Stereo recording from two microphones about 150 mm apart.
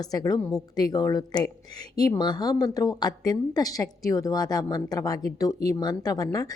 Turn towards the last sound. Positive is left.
turn(degrees=25)  # may be behind; listen again after turning